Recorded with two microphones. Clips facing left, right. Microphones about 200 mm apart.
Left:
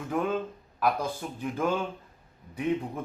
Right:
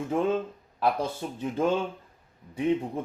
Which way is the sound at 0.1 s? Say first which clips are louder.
Right 2 dB; 25° right (ahead or behind).